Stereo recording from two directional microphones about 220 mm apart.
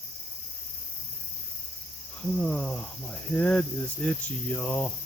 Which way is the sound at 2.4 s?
5° left (ahead or behind).